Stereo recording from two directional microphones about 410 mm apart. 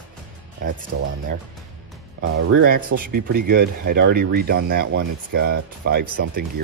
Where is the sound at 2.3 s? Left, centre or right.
Right.